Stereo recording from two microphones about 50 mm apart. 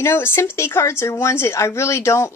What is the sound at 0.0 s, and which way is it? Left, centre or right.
Speech, left.